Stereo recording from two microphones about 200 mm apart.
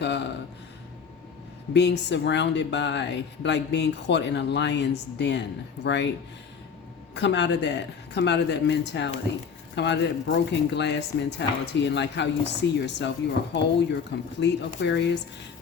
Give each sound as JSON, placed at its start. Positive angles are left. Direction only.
{"t": 0.0, "sound": "a sound", "side_deg": 60}
{"t": 1.7, "sound": "speech", "side_deg": 60}
{"t": 7.1, "sound": "speech", "side_deg": 60}